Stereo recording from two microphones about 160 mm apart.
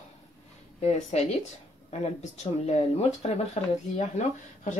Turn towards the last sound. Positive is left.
turn(degrees=45)  # may be behind; listen again after turning